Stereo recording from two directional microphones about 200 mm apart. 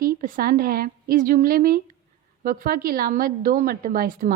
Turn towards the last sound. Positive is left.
turn(degrees=-45)  # may be behind; listen again after turning